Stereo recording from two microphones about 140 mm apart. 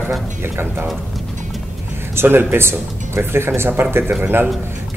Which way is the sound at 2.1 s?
15° right (ahead or behind).